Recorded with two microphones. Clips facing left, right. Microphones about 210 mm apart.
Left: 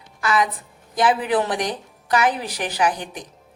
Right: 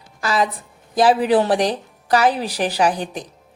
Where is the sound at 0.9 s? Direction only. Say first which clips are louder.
Right 4 dB; 35° right (ahead or behind).